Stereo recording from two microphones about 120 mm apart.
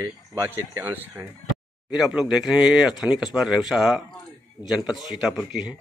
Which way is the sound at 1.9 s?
5° right (ahead or behind).